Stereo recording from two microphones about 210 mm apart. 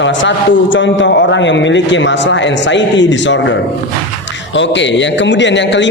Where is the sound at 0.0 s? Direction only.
60° left (ahead or behind).